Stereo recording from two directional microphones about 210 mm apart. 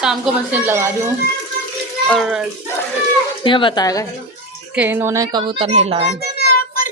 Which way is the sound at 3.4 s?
25° left (ahead or behind).